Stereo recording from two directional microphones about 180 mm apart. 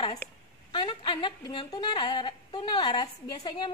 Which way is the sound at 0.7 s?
25° left (ahead or behind).